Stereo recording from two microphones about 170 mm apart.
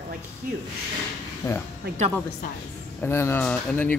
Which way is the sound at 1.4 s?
20° left (ahead or behind).